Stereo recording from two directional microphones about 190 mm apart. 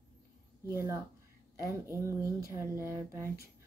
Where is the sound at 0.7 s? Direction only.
15° right (ahead or behind).